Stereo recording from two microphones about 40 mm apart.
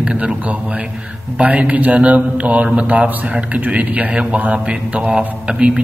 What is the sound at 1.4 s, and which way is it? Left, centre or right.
A man's voice, right.